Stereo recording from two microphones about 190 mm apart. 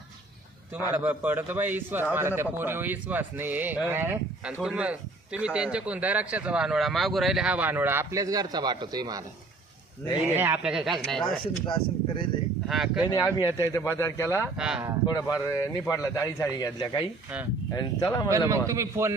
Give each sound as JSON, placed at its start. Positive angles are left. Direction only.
{"t": 0.7, "sound": "speech", "side_deg": -10}
{"t": 10.2, "sound": "speech", "side_deg": -10}
{"t": 11.6, "sound": "speech", "side_deg": 25}
{"t": 12.6, "sound": "speech", "side_deg": 0}
{"t": 13.1, "sound": "speech", "side_deg": 15}
{"t": 14.5, "sound": "speech", "side_deg": -5}
{"t": 15.0, "sound": "a man's voice", "side_deg": 20}
{"t": 18.3, "sound": "speech", "side_deg": -15}